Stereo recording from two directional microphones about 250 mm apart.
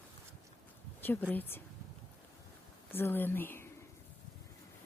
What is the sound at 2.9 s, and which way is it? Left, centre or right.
Speech, centre.